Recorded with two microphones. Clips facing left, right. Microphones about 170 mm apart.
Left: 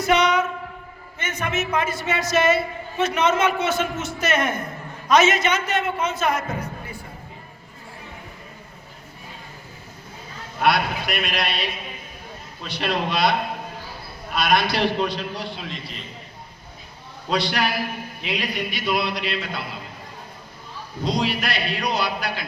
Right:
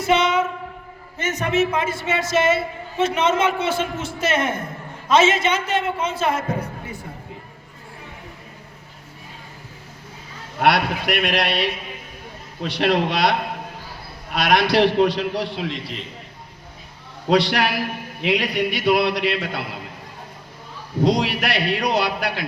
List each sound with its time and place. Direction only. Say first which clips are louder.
0.0 s a sound: right 1 dB; 25° right (ahead or behind)
1.2 s a man's voice: right 6 dB; 40° right (ahead or behind)
10.6 s a man's voice: right 2 dB; 80° right
14.3 s a man's voice: right 4 dB; 80° right
17.2 s a man's voice: right 5 dB; 75° right (ahead or behind)
21.0 s a man's voice: right 5 dB; 75° right (ahead or behind)